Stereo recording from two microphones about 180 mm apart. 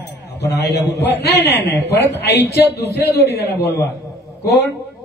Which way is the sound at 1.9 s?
70° left (ahead or behind).